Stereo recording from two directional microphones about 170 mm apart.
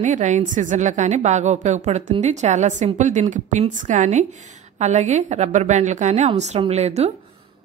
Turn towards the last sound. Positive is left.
turn(degrees=-40)  # may be behind; listen again after turning